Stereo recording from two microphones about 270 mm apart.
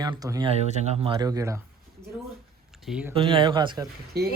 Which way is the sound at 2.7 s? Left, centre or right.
Centre.